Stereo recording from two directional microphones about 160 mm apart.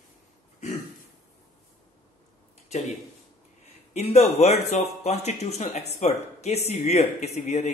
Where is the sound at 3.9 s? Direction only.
45° left (ahead or behind).